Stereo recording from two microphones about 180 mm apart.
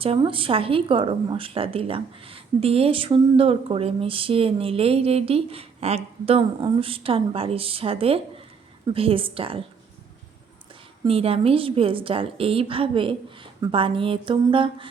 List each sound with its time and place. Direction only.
0.0 s speech: 30° right (ahead or behind)
11.0 s a woman's voice: 30° right (ahead or behind)